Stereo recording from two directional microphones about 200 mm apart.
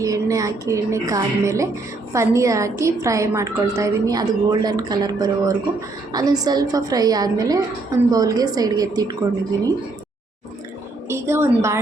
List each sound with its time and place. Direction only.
0.0 s a woman's voice: 15° right (ahead or behind)
11.1 s a woman's voice: 15° right (ahead or behind)